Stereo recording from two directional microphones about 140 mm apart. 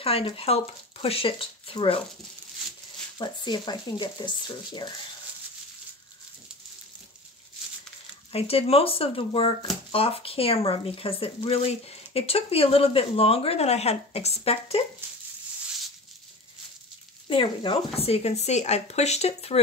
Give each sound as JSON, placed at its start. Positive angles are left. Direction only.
{"t": 0.0, "sound": "speech", "side_deg": 45}
{"t": 3.2, "sound": "speech", "side_deg": 30}
{"t": 8.3, "sound": "speech", "side_deg": 45}
{"t": 17.3, "sound": "speech", "side_deg": 40}